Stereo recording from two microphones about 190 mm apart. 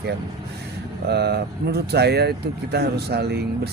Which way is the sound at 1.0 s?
60° right (ahead or behind).